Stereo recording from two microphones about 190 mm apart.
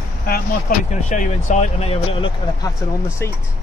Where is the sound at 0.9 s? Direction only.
40° left (ahead or behind).